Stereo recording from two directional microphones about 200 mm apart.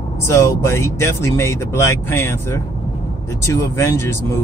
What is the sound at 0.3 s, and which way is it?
Speech, 15° left (ahead or behind).